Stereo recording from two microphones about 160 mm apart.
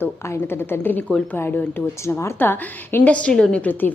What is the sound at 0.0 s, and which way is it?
A woman's voice, 15° left (ahead or behind).